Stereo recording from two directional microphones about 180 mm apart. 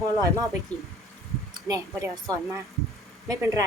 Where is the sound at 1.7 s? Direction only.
20° right (ahead or behind).